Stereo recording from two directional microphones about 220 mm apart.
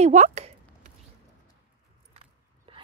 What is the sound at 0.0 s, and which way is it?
Speech, 30° right (ahead or behind).